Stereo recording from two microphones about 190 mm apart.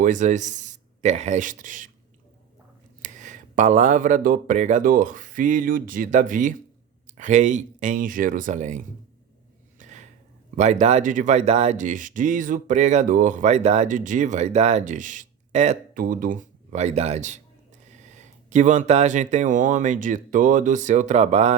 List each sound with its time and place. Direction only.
0.0 s speech: 40° right (ahead or behind)
3.0 s speech: 40° right (ahead or behind)
9.7 s a sound: 40° right (ahead or behind)
10.6 s speech: 35° right (ahead or behind)